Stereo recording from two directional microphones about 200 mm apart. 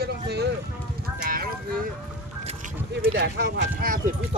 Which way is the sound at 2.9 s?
55° right (ahead or behind).